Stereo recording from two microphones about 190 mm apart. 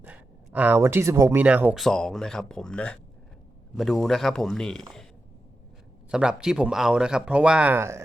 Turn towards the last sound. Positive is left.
turn(degrees=-10)  # may be behind; listen again after turning